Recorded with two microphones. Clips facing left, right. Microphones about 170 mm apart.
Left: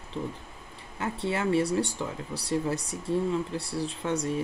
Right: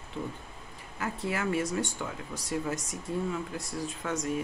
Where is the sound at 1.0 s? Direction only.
30° left (ahead or behind).